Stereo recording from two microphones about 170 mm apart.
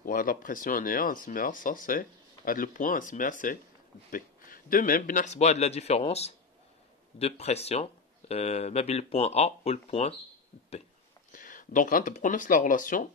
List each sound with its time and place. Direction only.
0.0 s speech: 55° left (ahead or behind); by 10.1 s 35° left (ahead or behind)
11.3 s speech: 50° left (ahead or behind)